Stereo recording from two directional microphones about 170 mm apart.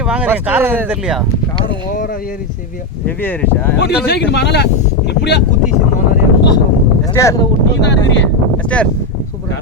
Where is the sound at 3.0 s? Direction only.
10° left (ahead or behind).